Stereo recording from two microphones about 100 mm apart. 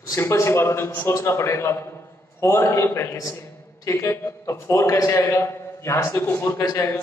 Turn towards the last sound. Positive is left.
turn(degrees=25)  # may be behind; listen again after turning